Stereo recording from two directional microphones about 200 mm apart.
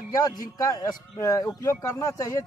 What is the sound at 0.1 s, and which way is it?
A man's voice, 20° left (ahead or behind).